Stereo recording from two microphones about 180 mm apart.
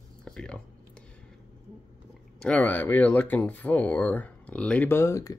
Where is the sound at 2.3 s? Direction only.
5° left (ahead or behind).